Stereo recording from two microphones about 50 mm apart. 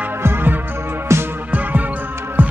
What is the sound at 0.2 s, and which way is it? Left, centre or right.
Music, right.